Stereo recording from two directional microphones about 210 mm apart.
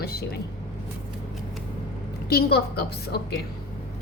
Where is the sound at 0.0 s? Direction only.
50° left (ahead or behind).